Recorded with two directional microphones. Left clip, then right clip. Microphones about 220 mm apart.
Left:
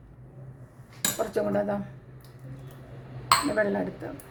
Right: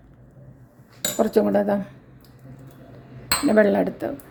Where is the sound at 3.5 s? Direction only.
40° right (ahead or behind).